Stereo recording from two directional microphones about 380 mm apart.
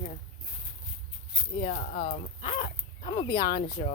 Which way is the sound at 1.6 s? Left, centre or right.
Centre.